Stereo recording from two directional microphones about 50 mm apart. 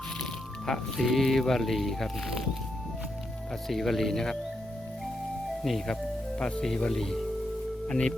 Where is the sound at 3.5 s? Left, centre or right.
Centre.